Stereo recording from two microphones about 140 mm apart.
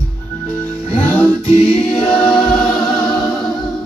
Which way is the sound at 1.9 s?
5° left (ahead or behind).